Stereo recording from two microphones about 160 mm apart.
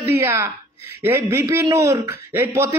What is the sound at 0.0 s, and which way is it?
A woman's voice, 15° right (ahead or behind).